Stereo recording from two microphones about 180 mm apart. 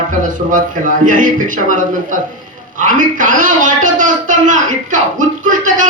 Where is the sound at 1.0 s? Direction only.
45° right (ahead or behind).